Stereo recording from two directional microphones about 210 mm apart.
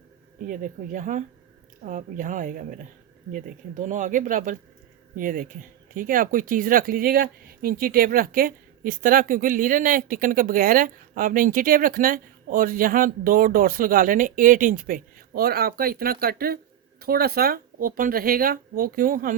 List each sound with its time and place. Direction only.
0.4 s speech: 40° right (ahead or behind)